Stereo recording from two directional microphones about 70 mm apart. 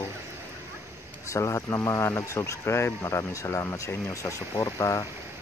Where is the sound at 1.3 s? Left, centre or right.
Left.